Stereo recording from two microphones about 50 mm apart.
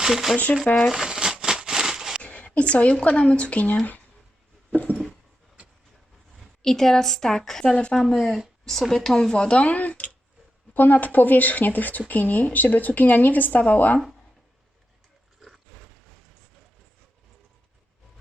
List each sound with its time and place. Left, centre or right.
0.0 s speech: centre
0.6 s speech: left
0.9 s crumpling: centre
2.2 s speech: left
6.6 s a woman's voice: centre; by 14.0 s left